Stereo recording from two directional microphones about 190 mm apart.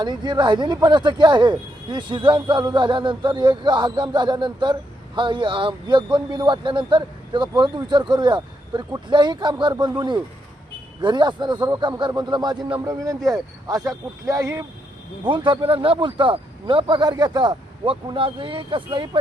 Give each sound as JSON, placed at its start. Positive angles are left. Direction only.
{"t": 0.0, "sound": "speech", "side_deg": -25}
{"t": 11.0, "sound": "speech", "side_deg": -25}